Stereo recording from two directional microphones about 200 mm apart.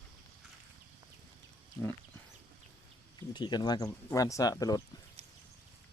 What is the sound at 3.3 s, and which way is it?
Speech, 20° left (ahead or behind).